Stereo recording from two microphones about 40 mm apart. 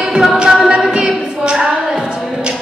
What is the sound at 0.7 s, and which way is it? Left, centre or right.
Music, right.